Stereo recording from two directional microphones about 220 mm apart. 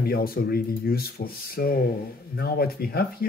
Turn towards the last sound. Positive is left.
turn(degrees=45)  # may be behind; listen again after turning